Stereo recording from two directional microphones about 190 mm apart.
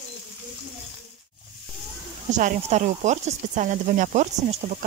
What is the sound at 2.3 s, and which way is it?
Speech, 40° right (ahead or behind).